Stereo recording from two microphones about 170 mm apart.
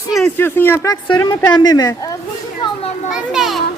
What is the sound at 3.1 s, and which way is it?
Speech, 5° right (ahead or behind).